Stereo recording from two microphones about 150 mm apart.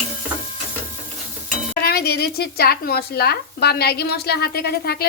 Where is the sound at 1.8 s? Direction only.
90° left.